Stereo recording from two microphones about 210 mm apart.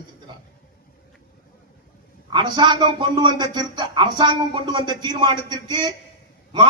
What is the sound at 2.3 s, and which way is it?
Speech, 20° right (ahead or behind).